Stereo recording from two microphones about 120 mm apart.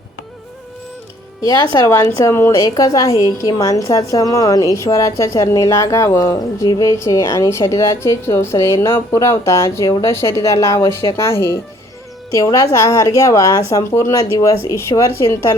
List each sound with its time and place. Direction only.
1.5 s speech: 35° left (ahead or behind)
1.9 s a woman's voice: 20° left (ahead or behind)
11.3 s a woman's voice: 20° left (ahead or behind)